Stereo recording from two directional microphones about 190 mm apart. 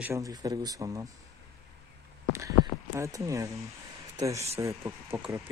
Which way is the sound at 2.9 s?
15° right (ahead or behind).